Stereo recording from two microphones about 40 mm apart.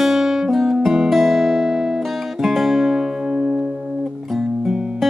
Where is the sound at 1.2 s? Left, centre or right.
Centre.